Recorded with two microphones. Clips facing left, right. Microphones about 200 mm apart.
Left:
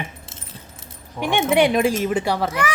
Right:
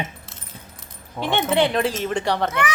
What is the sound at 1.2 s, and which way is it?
Speech, 15° left (ahead or behind).